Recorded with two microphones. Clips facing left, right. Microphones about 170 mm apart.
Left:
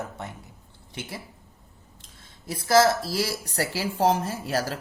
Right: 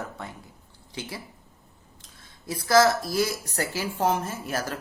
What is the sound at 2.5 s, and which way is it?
Speech, 25° left (ahead or behind).